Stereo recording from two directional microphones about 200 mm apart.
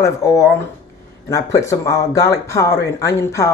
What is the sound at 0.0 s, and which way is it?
Speech, 15° left (ahead or behind).